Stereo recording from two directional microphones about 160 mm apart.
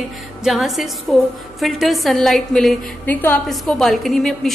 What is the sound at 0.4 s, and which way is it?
A woman's voice, centre (ahead or behind).